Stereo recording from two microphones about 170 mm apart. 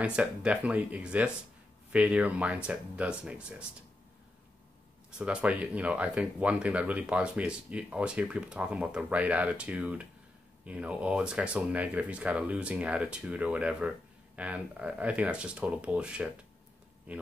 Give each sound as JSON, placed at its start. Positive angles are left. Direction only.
{"t": 0.0, "sound": "speech", "side_deg": -5}
{"t": 5.1, "sound": "speech", "side_deg": -5}